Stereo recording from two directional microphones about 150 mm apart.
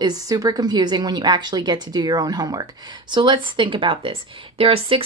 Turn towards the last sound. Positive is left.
turn(degrees=-40)  # may be behind; listen again after turning